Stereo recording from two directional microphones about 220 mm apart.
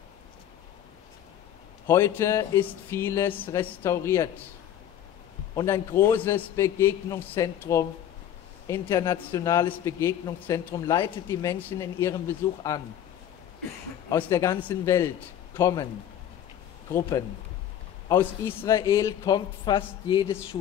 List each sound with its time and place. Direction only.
1.9 s speech: 10° left (ahead or behind)
5.6 s speech: 10° left (ahead or behind)
14.0 s speech: 10° left (ahead or behind)
18.0 s speech: 10° left (ahead or behind)